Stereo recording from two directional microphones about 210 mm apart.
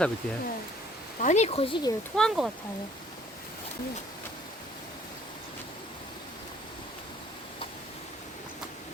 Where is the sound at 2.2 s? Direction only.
Centre (ahead or behind).